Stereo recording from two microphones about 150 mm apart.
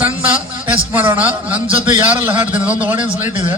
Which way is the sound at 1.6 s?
35° right (ahead or behind).